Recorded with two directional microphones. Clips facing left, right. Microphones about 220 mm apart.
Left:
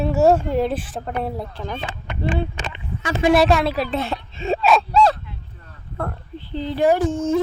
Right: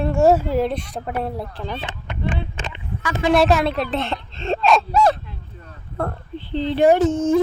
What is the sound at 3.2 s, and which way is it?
Speech, 5° left (ahead or behind).